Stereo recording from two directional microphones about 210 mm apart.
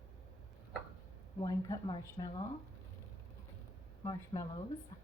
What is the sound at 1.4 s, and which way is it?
A woman's voice, 15° left (ahead or behind).